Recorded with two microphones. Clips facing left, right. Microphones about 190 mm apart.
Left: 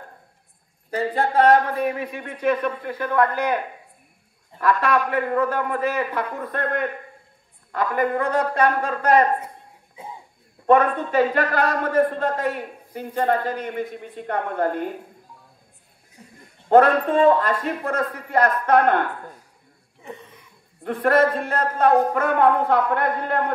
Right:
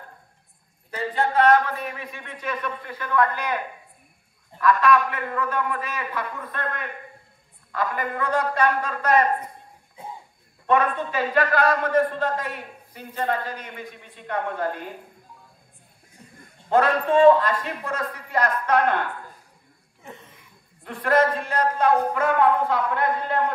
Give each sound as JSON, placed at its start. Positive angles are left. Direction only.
{"t": 0.8, "sound": "a man's voice", "side_deg": 35}
{"t": 1.5, "sound": "a man's voice", "side_deg": 50}
{"t": 2.5, "sound": "a man's voice", "side_deg": 30}
{"t": 4.6, "sound": "a man's voice", "side_deg": 35}
{"t": 5.9, "sound": "a man's voice", "side_deg": 60}
{"t": 6.3, "sound": "a man's voice", "side_deg": 45}
{"t": 10.7, "sound": "a man's voice", "side_deg": 50}
{"t": 16.6, "sound": "a man's voice", "side_deg": 45}
{"t": 17.9, "sound": "a man's voice", "side_deg": 55}
{"t": 20.8, "sound": "a man's voice", "side_deg": 55}